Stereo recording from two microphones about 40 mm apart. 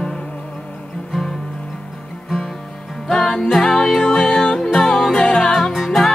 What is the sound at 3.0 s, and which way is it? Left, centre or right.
Music, centre.